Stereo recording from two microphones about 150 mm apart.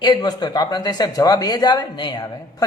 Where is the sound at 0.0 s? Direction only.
30° left (ahead or behind).